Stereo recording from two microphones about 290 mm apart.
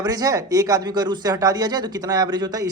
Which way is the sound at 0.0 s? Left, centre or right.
Centre.